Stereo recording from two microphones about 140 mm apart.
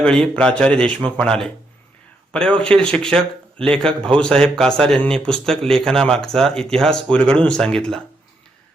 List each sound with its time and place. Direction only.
0.0 s a man's voice: 5° left (ahead or behind)